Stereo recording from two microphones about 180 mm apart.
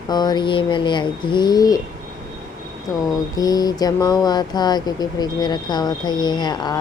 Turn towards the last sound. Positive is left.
turn(degrees=25)  # may be behind; listen again after turning